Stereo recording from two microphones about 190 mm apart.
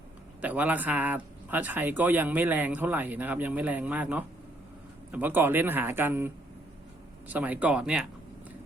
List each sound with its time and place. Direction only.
0.4 s speech: 10° right (ahead or behind)